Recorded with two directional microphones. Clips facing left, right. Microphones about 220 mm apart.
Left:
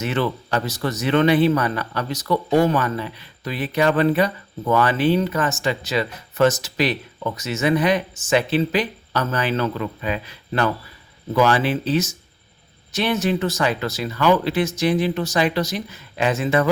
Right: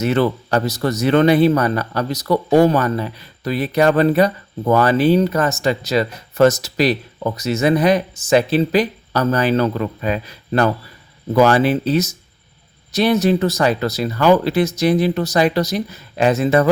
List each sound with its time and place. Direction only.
0.0 s speech: 40° right (ahead or behind)